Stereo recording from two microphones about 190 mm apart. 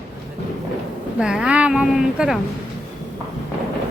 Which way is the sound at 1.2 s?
5° right (ahead or behind).